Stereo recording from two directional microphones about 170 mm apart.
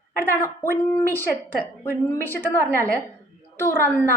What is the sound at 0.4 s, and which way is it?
Speech, 15° left (ahead or behind).